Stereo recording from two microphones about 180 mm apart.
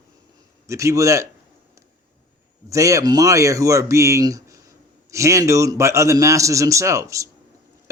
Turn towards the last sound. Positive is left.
turn(degrees=-15)  # may be behind; listen again after turning